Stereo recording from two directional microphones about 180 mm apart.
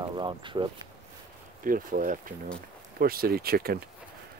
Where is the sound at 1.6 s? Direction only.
50° right (ahead or behind).